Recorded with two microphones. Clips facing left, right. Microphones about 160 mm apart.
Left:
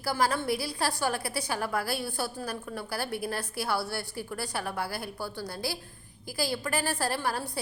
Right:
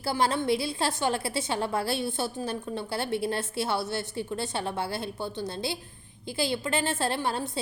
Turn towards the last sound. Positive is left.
turn(degrees=-25)  # may be behind; listen again after turning